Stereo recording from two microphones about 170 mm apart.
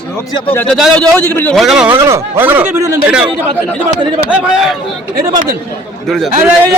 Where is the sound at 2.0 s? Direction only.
15° right (ahead or behind).